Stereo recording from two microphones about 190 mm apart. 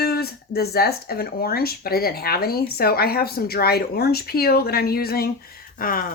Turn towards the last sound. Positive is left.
turn(degrees=50)  # may be behind; listen again after turning